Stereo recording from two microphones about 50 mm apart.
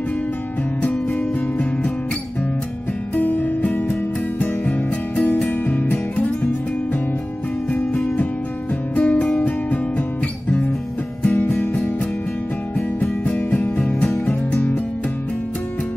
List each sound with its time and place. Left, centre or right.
3.2 s music: left
7.7 s music: centre
11.2 s music: left